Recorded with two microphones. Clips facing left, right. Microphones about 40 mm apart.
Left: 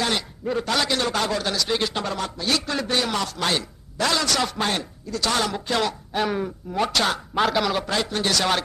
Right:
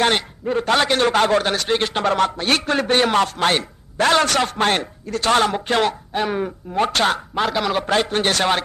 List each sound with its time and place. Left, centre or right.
0.0 s a man's voice: right
6.1 s speech: centre
6.4 s speech: right
7.3 s a man's voice: centre
7.8 s speech: right